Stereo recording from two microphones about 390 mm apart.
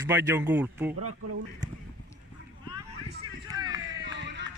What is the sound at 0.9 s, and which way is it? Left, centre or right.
Speech, right.